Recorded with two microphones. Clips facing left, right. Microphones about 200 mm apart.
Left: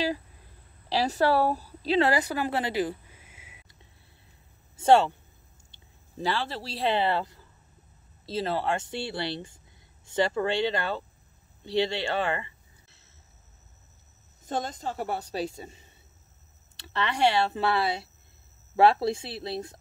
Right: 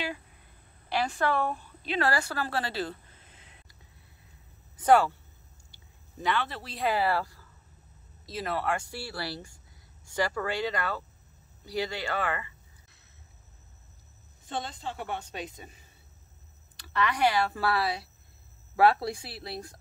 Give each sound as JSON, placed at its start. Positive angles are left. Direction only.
{"t": 0.8, "sound": "speech", "side_deg": 35}
{"t": 2.0, "sound": "a woman's voice", "side_deg": 20}
{"t": 4.7, "sound": "speech", "side_deg": 25}
{"t": 11.6, "sound": "a sound", "side_deg": 25}
{"t": 14.4, "sound": "speech", "side_deg": 45}